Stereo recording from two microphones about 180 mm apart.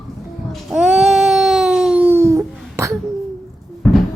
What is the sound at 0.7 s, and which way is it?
Baby cry, 5° right (ahead or behind).